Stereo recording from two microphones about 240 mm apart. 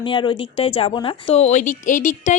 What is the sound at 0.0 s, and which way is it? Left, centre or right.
A woman's voice, left.